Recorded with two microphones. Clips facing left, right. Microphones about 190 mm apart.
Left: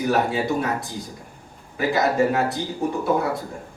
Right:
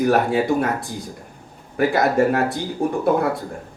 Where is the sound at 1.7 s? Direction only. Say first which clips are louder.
Right 3 dB; 55° right (ahead or behind).